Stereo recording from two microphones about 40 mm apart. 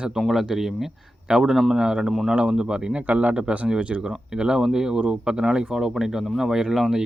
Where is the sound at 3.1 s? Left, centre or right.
Right.